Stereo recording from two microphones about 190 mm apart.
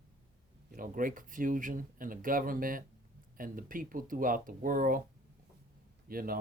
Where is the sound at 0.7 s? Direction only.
45° right (ahead or behind).